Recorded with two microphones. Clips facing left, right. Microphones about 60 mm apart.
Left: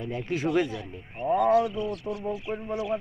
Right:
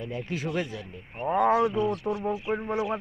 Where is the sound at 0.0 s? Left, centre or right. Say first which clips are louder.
Left 3 dB; centre.